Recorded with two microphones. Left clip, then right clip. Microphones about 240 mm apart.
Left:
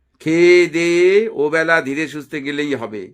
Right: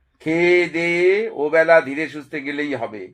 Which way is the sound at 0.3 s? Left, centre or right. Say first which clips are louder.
Left 5 dB; left.